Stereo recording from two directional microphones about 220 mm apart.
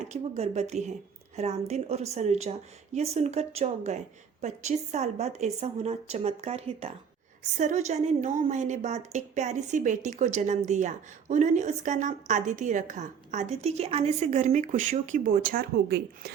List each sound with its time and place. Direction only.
0.0 s a woman's voice: 30° right (ahead or behind)